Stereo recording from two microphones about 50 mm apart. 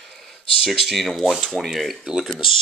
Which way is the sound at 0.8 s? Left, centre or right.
Centre.